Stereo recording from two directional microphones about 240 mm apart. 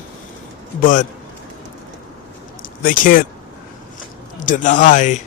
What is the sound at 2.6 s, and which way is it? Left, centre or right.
Speech, left.